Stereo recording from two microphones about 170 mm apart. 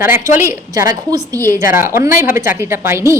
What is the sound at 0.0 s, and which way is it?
A woman's voice, 15° right (ahead or behind).